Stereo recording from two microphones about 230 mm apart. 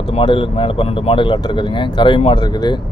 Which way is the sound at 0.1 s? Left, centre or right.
Left.